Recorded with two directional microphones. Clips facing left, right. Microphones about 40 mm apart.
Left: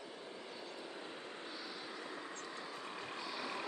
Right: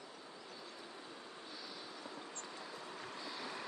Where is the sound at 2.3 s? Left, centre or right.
Left.